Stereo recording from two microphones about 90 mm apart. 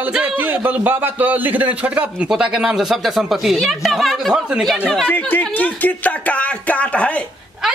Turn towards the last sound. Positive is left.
turn(degrees=15)  # may be behind; listen again after turning